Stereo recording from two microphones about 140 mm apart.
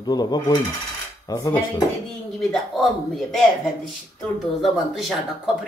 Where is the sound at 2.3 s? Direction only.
Centre (ahead or behind).